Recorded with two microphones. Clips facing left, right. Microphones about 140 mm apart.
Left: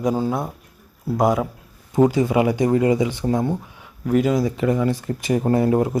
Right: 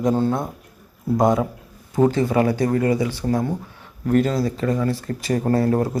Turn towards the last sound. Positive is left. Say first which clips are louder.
# left 1 dB
turn(degrees=15)  # may be behind; listen again after turning